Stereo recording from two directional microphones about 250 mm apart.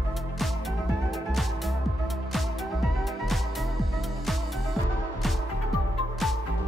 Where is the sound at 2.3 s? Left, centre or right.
Centre.